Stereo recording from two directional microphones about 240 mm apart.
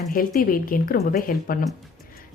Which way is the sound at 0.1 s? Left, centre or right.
Left.